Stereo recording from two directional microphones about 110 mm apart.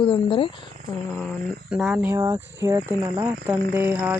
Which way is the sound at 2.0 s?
25° right (ahead or behind).